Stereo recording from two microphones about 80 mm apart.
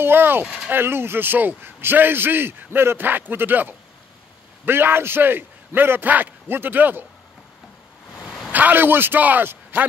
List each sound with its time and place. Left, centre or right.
0.0 s a man's voice: right
8.5 s a man's voice: right